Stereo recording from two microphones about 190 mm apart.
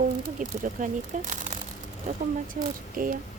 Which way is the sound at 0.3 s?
45° right (ahead or behind).